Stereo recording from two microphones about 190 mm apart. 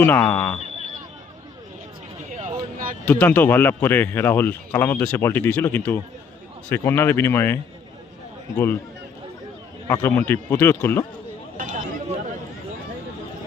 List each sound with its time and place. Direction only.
0.0 s speech: 10° left (ahead or behind)
2.3 s a sound: 40° right (ahead or behind)
3.1 s speech: 10° left (ahead or behind)
9.8 s speech: 10° left (ahead or behind)
11.5 s chatter: 45° right (ahead or behind)